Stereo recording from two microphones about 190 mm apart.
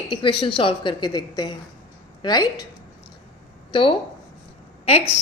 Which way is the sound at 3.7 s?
30° left (ahead or behind).